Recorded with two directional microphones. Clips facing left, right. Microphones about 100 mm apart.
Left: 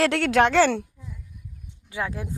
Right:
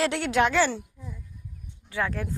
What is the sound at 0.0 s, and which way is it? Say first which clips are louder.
Speech: left 4 dB; 90° left.